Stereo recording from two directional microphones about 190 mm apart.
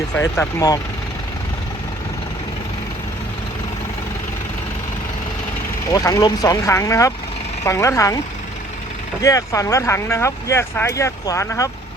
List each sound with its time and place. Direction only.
0.2 s speech: 15° left (ahead or behind)
5.9 s speech: 15° left (ahead or behind)
9.2 s speech: 15° left (ahead or behind)